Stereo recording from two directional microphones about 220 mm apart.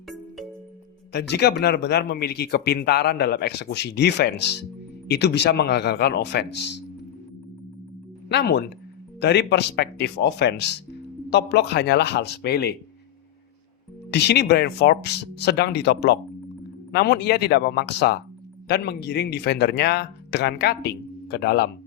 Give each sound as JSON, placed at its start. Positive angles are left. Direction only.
{"t": 1.1, "sound": "speech", "side_deg": 50}
{"t": 8.3, "sound": "speech", "side_deg": 50}
{"t": 14.1, "sound": "speech", "side_deg": 50}